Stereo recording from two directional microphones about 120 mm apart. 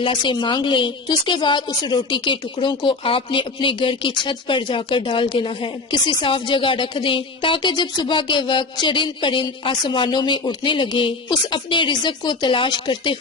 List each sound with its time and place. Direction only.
0.0 s speech: 45° left (ahead or behind)